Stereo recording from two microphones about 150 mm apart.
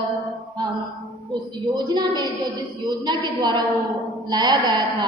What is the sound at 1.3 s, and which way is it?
A woman's voice, 30° right (ahead or behind).